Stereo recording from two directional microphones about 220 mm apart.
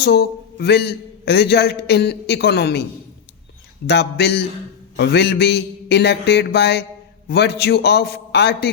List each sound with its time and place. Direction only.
0.0 s a man's voice: 50° left (ahead or behind)
3.8 s a man's voice: 50° left (ahead or behind)